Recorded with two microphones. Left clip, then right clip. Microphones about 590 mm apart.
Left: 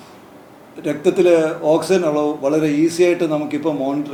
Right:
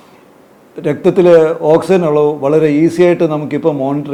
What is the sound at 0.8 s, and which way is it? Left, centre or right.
Speech, right.